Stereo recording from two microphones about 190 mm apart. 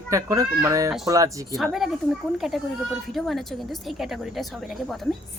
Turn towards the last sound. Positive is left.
turn(degrees=0)  # may be behind; listen again after turning